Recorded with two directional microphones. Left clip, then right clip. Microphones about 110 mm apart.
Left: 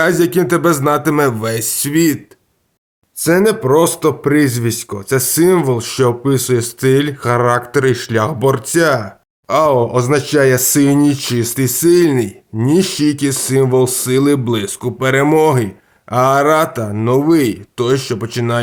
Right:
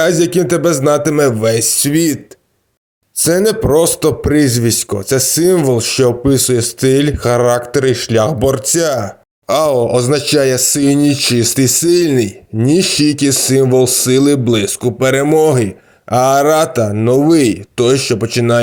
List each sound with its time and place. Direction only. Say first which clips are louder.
0.0 s speech: right 1 dB; 20° right (ahead or behind)
3.2 s speech: even; 40° right (ahead or behind)
9.5 s speech: right 1 dB; 45° right (ahead or behind); by 18.6 s 25° right (ahead or behind)